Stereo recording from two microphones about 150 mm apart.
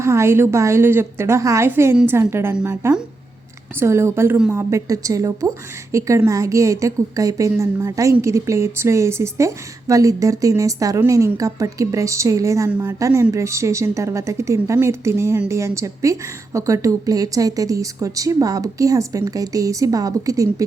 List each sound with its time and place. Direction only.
0.0 s a woman's voice: 20° right (ahead or behind)